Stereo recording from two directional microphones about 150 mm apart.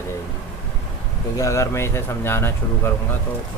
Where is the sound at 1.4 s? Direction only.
20° left (ahead or behind).